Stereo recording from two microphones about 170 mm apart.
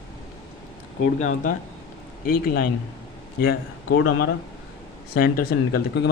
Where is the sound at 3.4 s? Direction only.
80° left.